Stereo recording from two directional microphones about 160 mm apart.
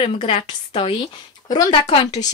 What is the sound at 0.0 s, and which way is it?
A woman's voice, 30° left (ahead or behind).